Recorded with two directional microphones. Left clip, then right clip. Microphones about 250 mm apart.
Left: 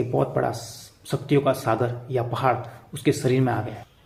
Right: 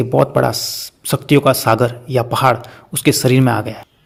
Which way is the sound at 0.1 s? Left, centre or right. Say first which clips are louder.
Right 13 dB; right.